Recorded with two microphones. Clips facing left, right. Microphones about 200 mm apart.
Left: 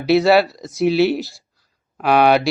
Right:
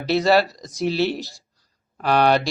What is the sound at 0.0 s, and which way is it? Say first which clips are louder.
Speech: left 4 dB; centre (ahead or behind).